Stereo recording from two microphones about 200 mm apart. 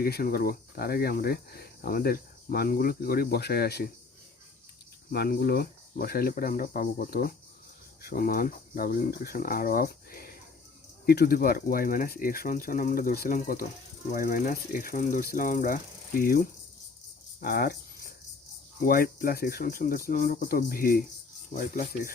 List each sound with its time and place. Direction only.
0.0 s speech: 50° left (ahead or behind)
5.1 s speech: 55° left (ahead or behind)
17.4 s speech: 50° left (ahead or behind)
18.8 s speech: 45° left (ahead or behind)